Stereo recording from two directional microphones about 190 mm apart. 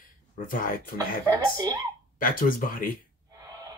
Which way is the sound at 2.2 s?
45° left (ahead or behind).